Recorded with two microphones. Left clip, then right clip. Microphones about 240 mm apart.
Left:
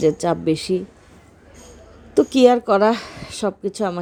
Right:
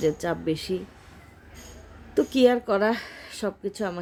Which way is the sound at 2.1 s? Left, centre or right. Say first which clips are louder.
Left 7 dB; centre.